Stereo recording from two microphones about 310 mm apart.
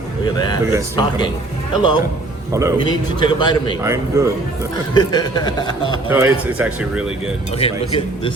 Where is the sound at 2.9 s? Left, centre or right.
Centre.